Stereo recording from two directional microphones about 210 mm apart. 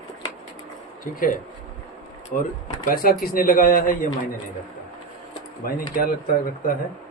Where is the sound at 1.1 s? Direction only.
40° left (ahead or behind).